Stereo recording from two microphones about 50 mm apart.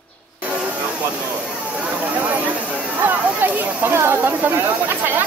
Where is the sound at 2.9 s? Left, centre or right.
Right.